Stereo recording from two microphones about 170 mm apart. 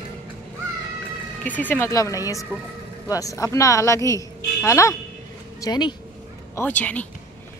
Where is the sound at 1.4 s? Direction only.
10° left (ahead or behind); by 5.9 s 25° left (ahead or behind).